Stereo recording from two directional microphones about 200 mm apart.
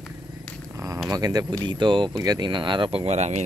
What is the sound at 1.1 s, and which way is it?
Speech, 20° right (ahead or behind).